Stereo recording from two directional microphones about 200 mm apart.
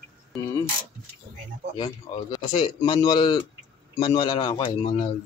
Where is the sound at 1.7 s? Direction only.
20° left (ahead or behind).